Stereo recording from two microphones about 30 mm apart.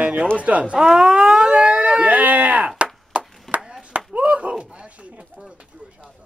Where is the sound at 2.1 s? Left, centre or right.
Right.